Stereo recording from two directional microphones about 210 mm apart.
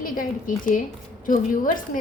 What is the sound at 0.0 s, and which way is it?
A woman's voice, 40° left (ahead or behind).